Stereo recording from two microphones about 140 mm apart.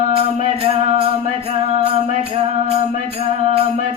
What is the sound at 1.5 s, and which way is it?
Music, 45° right (ahead or behind).